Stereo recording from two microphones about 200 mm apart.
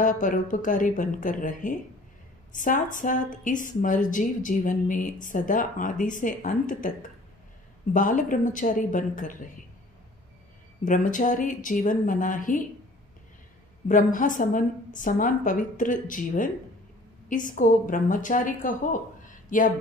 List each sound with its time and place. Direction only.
0.0 s a woman's voice: 40° left (ahead or behind)
10.8 s a woman's voice: 40° left (ahead or behind)
13.8 s a woman's voice: 40° left (ahead or behind)